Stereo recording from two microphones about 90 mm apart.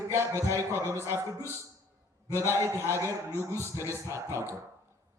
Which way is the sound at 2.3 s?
30° right (ahead or behind).